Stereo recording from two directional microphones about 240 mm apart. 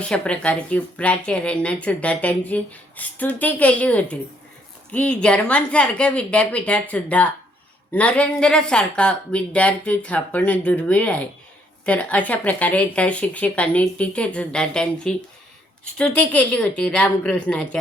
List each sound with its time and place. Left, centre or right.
0.0 s speech: centre